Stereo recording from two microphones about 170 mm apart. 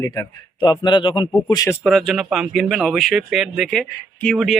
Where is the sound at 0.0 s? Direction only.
20° left (ahead or behind).